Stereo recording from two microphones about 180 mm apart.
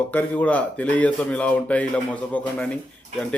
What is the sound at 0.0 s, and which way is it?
Speech, 10° left (ahead or behind).